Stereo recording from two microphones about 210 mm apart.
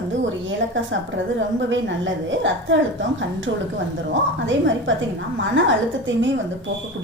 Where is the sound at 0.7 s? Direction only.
60° right (ahead or behind).